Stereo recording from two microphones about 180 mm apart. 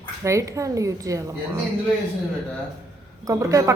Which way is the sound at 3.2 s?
15° right (ahead or behind).